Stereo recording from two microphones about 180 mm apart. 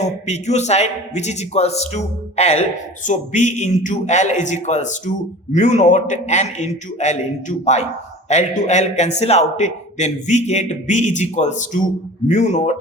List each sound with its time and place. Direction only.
0.0 s a man's voice: 40° left (ahead or behind)